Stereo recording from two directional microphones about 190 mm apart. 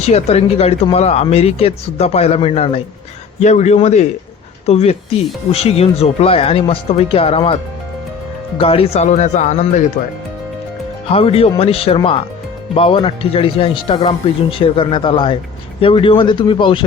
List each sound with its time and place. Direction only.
0.0 s speech: 35° left (ahead or behind)
11.1 s speech: 30° left (ahead or behind)